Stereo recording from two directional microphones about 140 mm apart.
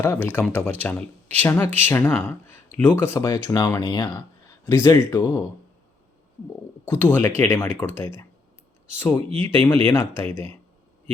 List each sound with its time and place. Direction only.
0.0 s speech: 15° left (ahead or behind)
6.8 s speech: 15° left (ahead or behind)